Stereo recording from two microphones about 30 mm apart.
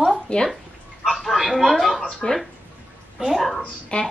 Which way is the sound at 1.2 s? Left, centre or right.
Centre.